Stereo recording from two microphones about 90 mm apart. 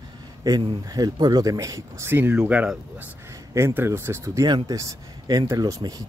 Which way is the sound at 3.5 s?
30° right (ahead or behind).